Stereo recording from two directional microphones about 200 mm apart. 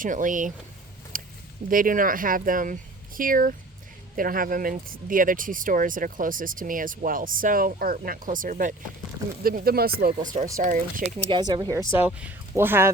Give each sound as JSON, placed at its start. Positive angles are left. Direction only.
{"t": 0.0, "sound": "speech", "side_deg": -40}
{"t": 1.1, "sound": "a sound", "side_deg": -40}
{"t": 1.7, "sound": "speech", "side_deg": -45}
{"t": 11.3, "sound": "speech", "side_deg": -25}